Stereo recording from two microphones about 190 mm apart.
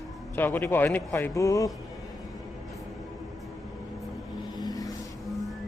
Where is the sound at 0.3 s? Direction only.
10° left (ahead or behind).